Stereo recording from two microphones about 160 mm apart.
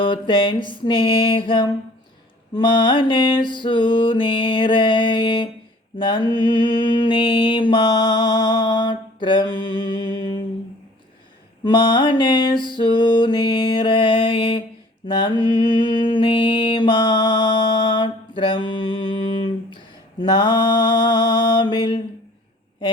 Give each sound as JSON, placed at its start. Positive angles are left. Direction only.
{"t": 0.0, "sound": "mantra", "side_deg": 30}
{"t": 11.6, "sound": "mantra", "side_deg": 30}